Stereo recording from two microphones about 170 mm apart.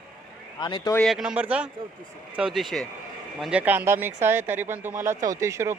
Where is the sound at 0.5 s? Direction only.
25° left (ahead or behind).